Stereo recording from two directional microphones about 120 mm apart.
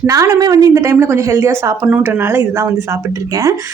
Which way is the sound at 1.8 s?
10° right (ahead or behind).